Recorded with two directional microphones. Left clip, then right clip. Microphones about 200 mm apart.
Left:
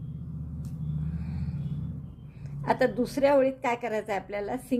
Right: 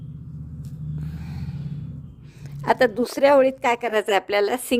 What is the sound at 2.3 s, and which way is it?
A woman's voice, 45° right (ahead or behind).